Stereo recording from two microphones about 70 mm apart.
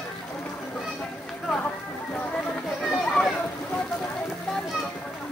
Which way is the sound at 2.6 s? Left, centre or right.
Centre.